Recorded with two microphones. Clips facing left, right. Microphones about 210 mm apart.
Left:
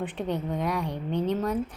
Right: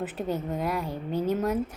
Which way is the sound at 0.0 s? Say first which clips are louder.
Even; 5° right (ahead or behind).